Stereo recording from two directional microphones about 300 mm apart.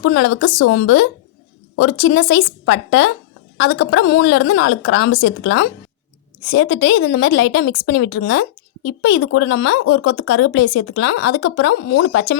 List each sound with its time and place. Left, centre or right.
0.0 s speech: left